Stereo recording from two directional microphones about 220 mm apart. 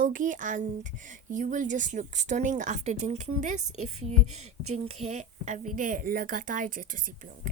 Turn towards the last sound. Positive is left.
turn(degrees=-40)  # may be behind; listen again after turning